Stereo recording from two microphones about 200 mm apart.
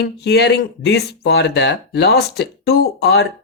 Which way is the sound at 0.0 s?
55° left (ahead or behind).